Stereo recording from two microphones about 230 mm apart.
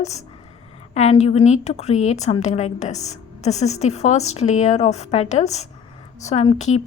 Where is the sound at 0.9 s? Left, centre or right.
Left.